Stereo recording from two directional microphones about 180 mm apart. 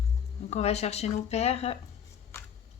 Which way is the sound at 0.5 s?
35° left (ahead or behind).